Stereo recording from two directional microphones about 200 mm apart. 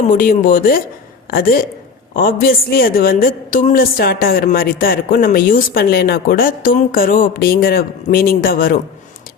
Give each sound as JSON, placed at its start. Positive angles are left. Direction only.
{"t": 0.1, "sound": "a woman's voice", "side_deg": 45}